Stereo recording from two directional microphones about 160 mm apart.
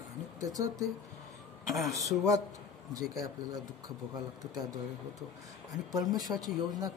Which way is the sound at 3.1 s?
25° right (ahead or behind).